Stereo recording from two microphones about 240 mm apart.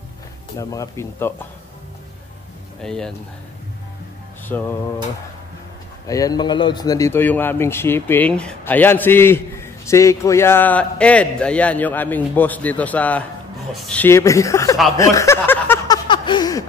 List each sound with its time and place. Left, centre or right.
0.6 s speech: centre
2.8 s speech: centre
4.5 s speech: centre
6.0 s speech: centre
15.0 s a sound: centre
16.1 s chuckle: centre